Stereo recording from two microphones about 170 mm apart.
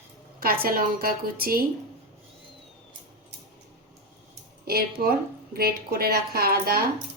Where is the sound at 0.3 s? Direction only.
60° right (ahead or behind).